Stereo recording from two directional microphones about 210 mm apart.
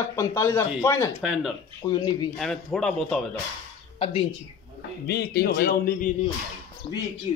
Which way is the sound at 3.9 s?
25° left (ahead or behind).